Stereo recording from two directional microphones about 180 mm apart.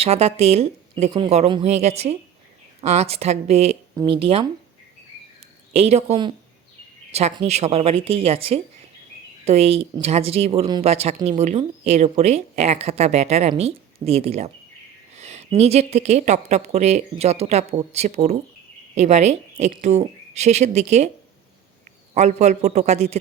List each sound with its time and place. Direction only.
0.0 s a woman's voice: 35° right (ahead or behind)
5.7 s a woman's voice: 35° right (ahead or behind)
22.1 s a woman's voice: 40° right (ahead or behind)